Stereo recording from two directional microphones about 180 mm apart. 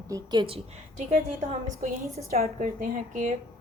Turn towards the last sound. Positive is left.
turn(degrees=-45)  # may be behind; listen again after turning